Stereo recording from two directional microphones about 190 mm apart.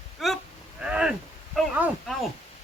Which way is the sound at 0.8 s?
5° right (ahead or behind).